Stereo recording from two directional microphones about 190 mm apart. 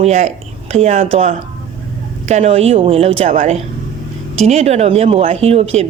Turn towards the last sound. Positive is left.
turn(degrees=-35)  # may be behind; listen again after turning